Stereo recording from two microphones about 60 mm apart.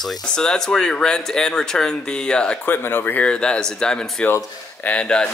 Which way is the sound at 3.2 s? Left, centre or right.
Centre.